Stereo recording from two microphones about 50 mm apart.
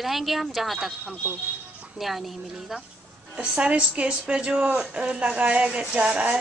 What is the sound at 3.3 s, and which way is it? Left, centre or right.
A woman's voice, right.